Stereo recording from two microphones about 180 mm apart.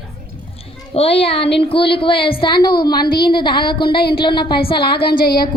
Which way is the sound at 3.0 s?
60° left (ahead or behind).